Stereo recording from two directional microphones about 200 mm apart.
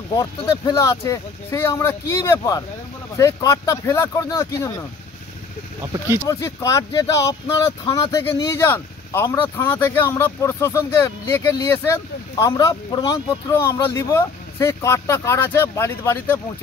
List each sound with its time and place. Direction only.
0.2 s speech: 15° left (ahead or behind)
5.8 s speech: 15° right (ahead or behind)
6.2 s speech: 15° left (ahead or behind)